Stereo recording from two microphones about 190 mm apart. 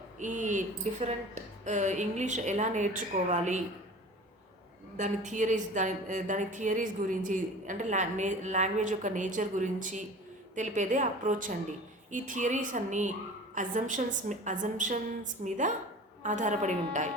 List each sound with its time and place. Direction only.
0.2 s a woman's voice: 40° right (ahead or behind)
4.9 s a woman's voice: 40° right (ahead or behind)